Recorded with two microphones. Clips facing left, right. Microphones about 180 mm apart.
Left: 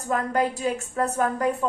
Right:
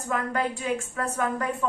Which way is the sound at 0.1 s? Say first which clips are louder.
Left 4 dB; 40° left (ahead or behind).